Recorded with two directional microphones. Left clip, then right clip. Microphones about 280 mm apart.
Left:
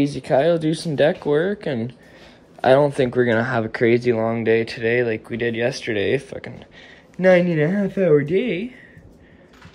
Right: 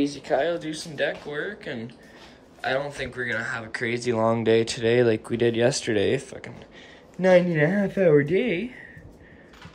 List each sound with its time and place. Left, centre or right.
0.5 s speech: centre